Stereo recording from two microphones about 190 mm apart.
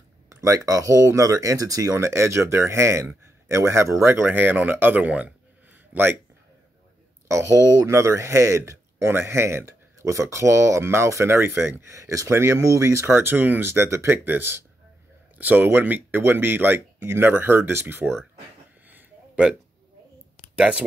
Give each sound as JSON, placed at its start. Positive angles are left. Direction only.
{"t": 0.3, "sound": "speech", "side_deg": -15}
{"t": 7.2, "sound": "speech", "side_deg": -15}
{"t": 18.9, "sound": "a sound", "side_deg": -10}
{"t": 20.5, "sound": "speech", "side_deg": -5}